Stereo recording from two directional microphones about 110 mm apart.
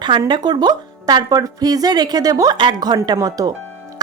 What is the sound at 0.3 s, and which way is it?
Speech, 45° right (ahead or behind).